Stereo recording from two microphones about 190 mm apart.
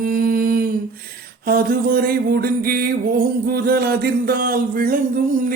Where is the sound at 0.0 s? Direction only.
50° right (ahead or behind).